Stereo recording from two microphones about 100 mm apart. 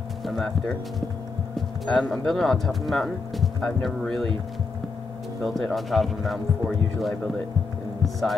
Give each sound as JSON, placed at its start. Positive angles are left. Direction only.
{"t": 0.2, "sound": "music", "side_deg": 0}
{"t": 1.9, "sound": "speech", "side_deg": 5}
{"t": 5.4, "sound": "speech", "side_deg": 0}
{"t": 8.0, "sound": "speech", "side_deg": 0}